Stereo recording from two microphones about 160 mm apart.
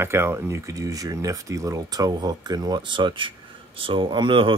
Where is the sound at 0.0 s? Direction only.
15° right (ahead or behind).